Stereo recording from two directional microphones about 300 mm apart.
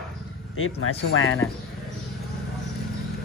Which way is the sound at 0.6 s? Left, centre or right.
Left.